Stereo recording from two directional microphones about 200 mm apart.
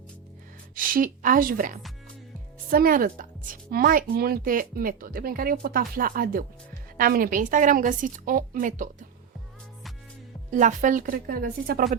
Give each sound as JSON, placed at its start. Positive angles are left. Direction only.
{"t": 0.8, "sound": "a woman's voice", "side_deg": -45}
{"t": 10.5, "sound": "speech", "side_deg": -40}